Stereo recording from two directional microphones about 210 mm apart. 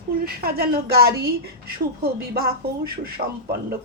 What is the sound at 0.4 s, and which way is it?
Speech, 45° right (ahead or behind).